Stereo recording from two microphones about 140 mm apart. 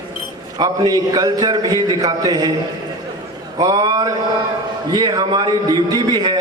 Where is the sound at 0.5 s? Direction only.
30° right (ahead or behind).